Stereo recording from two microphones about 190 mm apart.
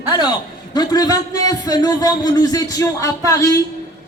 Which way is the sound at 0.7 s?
20° left (ahead or behind).